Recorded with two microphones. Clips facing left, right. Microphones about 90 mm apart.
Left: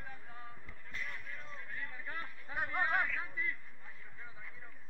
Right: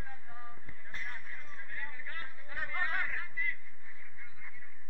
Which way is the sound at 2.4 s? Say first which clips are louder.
Left 2 dB; 20° left (ahead or behind).